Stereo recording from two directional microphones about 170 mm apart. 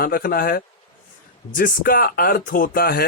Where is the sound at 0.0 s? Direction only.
60° left (ahead or behind).